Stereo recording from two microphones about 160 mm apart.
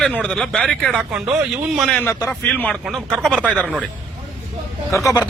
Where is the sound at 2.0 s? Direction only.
15° left (ahead or behind).